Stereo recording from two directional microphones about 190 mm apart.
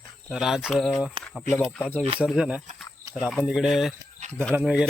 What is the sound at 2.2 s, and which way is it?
Speech, 5° right (ahead or behind).